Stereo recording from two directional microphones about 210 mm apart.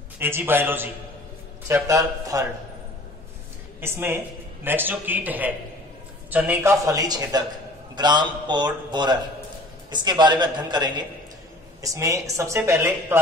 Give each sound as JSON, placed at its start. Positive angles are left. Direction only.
{"t": 0.2, "sound": "speech", "side_deg": -10}
{"t": 3.8, "sound": "a man's voice", "side_deg": -10}